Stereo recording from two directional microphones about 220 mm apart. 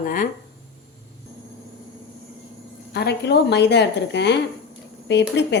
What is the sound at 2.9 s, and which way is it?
A woman's voice, 50° left (ahead or behind).